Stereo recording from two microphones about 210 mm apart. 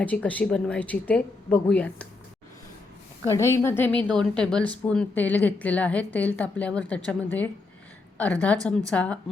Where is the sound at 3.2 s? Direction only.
15° left (ahead or behind).